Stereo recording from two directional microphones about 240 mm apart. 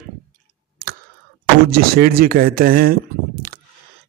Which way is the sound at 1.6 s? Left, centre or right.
Right.